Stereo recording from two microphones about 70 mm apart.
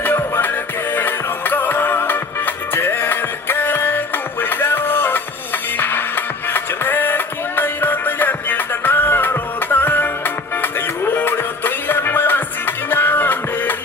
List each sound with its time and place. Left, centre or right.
0.0 s music: left